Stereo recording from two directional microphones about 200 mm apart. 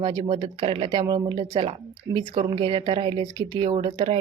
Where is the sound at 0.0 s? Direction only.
20° right (ahead or behind).